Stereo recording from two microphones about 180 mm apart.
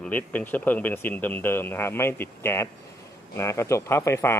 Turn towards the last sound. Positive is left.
turn(degrees=15)  # may be behind; listen again after turning